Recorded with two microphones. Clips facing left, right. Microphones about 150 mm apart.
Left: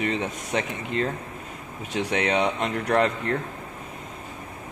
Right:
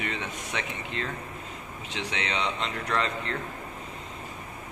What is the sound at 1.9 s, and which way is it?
Speech, 55° left (ahead or behind).